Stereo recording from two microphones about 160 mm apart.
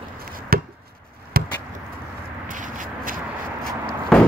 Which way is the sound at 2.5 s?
55° right (ahead or behind).